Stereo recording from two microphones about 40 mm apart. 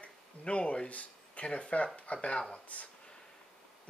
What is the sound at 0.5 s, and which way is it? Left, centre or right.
Speech, left.